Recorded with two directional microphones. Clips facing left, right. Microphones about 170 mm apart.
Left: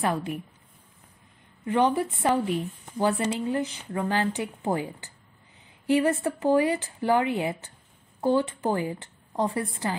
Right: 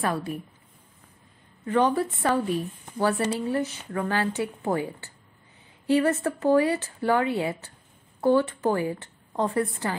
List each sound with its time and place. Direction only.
0.0 s speech: 15° left (ahead or behind)
1.6 s a woman's voice: 20° left (ahead or behind)